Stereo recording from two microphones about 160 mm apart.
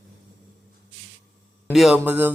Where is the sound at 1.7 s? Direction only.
Centre (ahead or behind).